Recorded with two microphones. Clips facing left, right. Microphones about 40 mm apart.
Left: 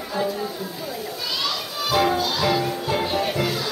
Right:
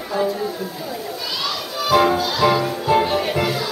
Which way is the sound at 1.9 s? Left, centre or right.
Centre.